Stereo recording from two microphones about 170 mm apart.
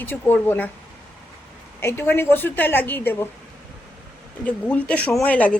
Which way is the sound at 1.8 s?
15° left (ahead or behind).